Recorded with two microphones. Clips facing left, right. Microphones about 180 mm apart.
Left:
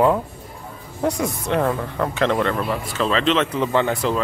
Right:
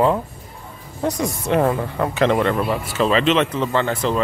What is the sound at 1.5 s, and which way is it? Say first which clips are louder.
Speech: right 3 dB; 20° right (ahead or behind).